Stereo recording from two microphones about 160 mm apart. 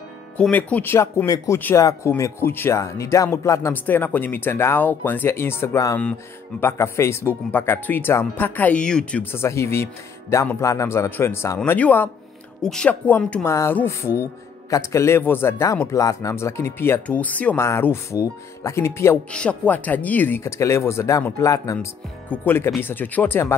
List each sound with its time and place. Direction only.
0.4 s speech: 10° left (ahead or behind)